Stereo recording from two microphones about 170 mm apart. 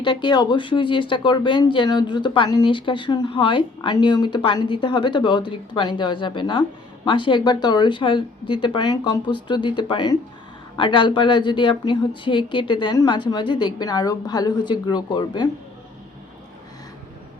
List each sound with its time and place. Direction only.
0.0 s speech: 25° left (ahead or behind)